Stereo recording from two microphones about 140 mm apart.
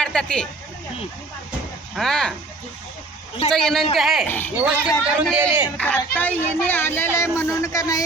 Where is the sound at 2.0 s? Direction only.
5° left (ahead or behind).